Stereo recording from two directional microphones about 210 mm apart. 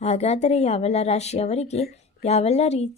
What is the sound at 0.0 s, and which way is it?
Speech, 30° left (ahead or behind).